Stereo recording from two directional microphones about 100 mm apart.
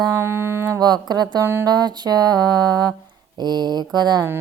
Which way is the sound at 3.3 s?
45° right (ahead or behind).